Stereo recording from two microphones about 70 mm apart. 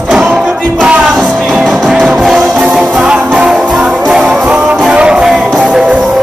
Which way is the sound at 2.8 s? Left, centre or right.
Centre.